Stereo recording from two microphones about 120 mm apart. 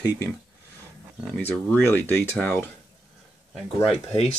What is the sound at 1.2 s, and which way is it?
Speech, 10° left (ahead or behind).